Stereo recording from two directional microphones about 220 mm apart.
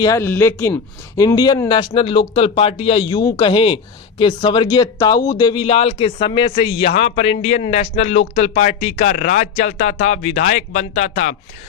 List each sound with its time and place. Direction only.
0.0 s speech: 15° left (ahead or behind); by 11.3 s 35° left (ahead or behind)